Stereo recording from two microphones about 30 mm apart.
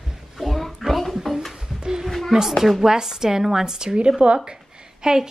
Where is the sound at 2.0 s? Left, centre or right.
Centre.